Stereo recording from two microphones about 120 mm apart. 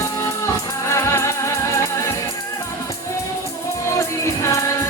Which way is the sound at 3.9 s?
25° left (ahead or behind).